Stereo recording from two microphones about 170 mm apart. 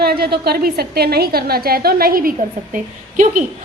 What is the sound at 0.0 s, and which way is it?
A woman's voice, 65° right (ahead or behind).